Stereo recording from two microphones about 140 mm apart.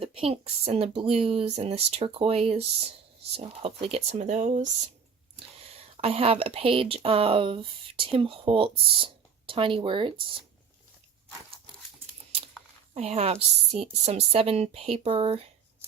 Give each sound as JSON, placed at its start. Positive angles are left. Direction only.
{"t": 0.0, "sound": "a woman's voice", "side_deg": -40}
{"t": 5.7, "sound": "speech", "side_deg": -45}
{"t": 12.9, "sound": "a woman's voice", "side_deg": -45}